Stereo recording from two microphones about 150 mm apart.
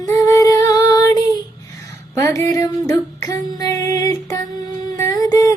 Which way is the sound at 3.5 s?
25° left (ahead or behind).